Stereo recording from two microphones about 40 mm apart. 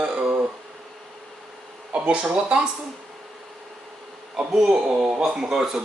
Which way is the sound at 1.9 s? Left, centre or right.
Right.